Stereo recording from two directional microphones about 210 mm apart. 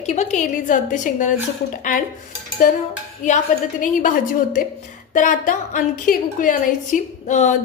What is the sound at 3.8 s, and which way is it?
A woman's voice, 40° left (ahead or behind).